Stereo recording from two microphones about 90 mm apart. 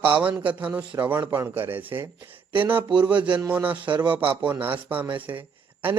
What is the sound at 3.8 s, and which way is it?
Speech, 65° right (ahead or behind).